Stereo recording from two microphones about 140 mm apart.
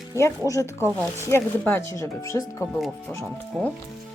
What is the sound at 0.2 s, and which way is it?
Speech, 20° left (ahead or behind).